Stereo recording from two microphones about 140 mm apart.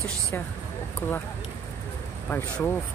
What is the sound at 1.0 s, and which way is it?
Speech, 15° left (ahead or behind).